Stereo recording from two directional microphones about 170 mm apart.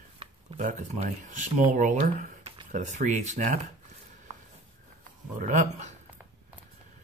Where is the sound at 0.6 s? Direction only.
50° right (ahead or behind).